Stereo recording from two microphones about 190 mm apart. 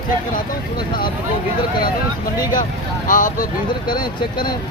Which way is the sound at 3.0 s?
45° left (ahead or behind).